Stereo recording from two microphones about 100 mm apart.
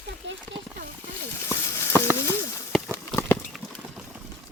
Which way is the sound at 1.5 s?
25° left (ahead or behind).